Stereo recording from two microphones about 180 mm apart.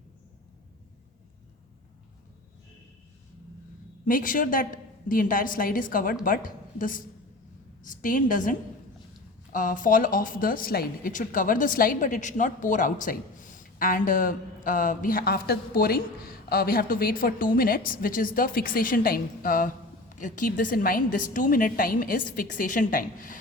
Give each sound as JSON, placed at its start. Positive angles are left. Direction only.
{"t": 4.0, "sound": "a woman's voice", "side_deg": 50}